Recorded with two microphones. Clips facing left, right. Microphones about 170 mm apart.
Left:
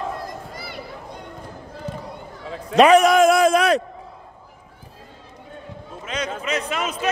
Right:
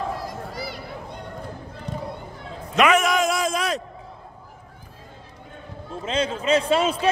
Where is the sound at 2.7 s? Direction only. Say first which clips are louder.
Left 6 dB; 35° left (ahead or behind); by 3.8 s 65° left (ahead or behind).